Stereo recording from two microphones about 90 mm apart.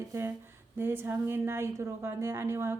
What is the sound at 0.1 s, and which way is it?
A woman's voice, 30° right (ahead or behind).